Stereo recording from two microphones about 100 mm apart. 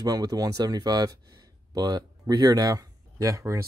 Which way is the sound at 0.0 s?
40° right (ahead or behind).